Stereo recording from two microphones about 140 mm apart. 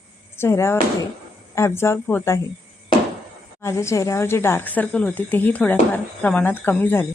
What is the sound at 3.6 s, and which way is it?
A woman's voice, 20° left (ahead or behind).